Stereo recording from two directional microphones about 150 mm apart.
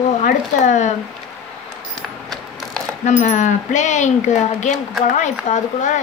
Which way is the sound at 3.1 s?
55° left (ahead or behind).